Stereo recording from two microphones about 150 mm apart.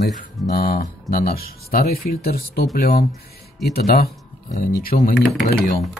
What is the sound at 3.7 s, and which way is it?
Speech, 85° left.